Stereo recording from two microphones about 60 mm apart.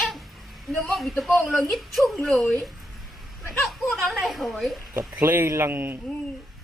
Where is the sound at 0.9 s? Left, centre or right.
Centre.